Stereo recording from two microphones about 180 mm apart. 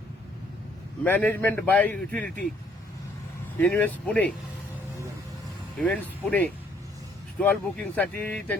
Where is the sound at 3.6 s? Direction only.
10° left (ahead or behind).